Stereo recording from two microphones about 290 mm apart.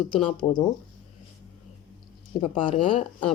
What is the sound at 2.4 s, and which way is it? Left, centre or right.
Speech, centre.